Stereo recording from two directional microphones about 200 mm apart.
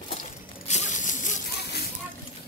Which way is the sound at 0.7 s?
35° left (ahead or behind).